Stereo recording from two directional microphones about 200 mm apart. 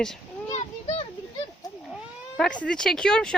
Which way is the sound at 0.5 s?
35° left (ahead or behind).